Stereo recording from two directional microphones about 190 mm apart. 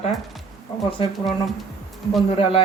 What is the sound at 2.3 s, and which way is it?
Speech, 30° left (ahead or behind).